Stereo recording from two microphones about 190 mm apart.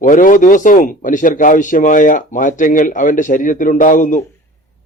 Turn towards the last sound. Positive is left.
turn(degrees=40)  # may be behind; listen again after turning